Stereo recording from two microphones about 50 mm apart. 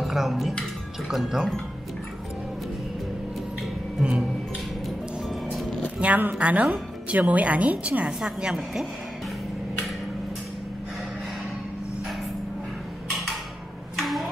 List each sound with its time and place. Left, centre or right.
0.0 s a woman's voice: centre
5.3 s music: centre
5.9 s a woman's voice: right; by 8.8 s centre
13.9 s a sound: centre